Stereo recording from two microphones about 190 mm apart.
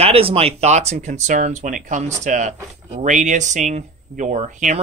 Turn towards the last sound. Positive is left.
turn(degrees=-40)  # may be behind; listen again after turning